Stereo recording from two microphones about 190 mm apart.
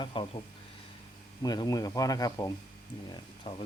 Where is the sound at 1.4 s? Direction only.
20° left (ahead or behind).